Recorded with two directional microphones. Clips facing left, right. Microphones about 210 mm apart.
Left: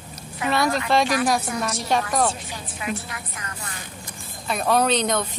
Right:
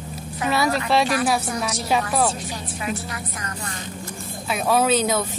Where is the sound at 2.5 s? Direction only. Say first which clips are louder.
Right 2 dB; 40° right (ahead or behind).